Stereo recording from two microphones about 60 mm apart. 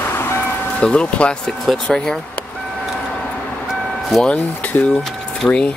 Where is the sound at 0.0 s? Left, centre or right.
Left.